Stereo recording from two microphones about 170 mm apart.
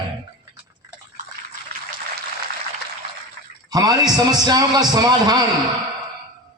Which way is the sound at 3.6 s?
25° right (ahead or behind).